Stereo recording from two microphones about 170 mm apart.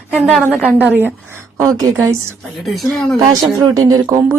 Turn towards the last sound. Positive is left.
turn(degrees=-15)  # may be behind; listen again after turning